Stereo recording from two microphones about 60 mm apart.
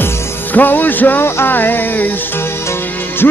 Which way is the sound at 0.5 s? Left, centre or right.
Left.